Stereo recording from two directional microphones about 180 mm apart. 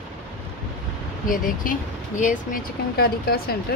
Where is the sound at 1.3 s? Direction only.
45° left (ahead or behind).